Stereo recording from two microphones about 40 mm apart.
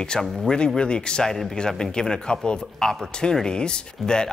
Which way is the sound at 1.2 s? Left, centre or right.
Centre.